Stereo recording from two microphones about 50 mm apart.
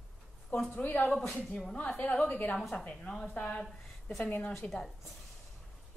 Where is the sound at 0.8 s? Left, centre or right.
Left.